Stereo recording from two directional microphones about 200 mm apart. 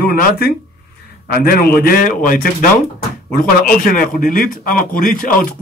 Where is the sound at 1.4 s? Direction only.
50° left (ahead or behind).